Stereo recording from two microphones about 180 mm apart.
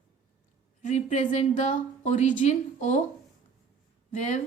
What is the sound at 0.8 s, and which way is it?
A woman's voice, 40° left (ahead or behind).